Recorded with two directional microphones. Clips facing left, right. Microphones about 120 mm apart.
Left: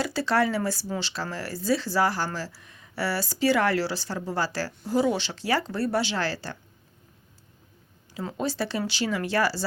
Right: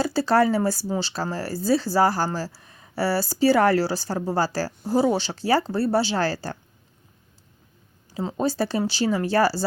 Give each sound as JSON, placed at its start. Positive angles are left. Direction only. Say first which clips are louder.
{"t": 0.0, "sound": "speech", "louder": "right 5 dB", "side_deg": -35}
{"t": 8.4, "sound": "speech", "louder": "right 5 dB", "side_deg": -40}